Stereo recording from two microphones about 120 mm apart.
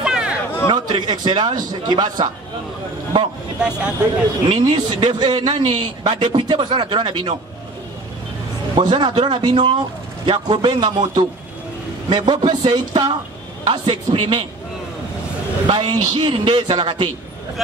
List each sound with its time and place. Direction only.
0.0 s chatter: 10° right (ahead or behind)
0.7 s a man's voice: 40° right (ahead or behind)
3.5 s speech: 10° right (ahead or behind)
4.5 s a man's voice: 40° right (ahead or behind)
8.7 s a man's voice: 40° right (ahead or behind)
15.6 s a man's voice: 40° right (ahead or behind)